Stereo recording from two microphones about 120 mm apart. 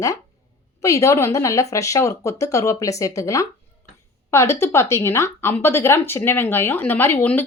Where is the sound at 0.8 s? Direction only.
25° left (ahead or behind).